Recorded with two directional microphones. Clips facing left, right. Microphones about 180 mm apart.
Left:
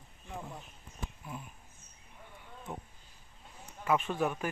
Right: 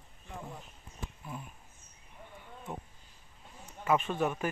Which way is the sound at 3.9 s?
Centre (ahead or behind).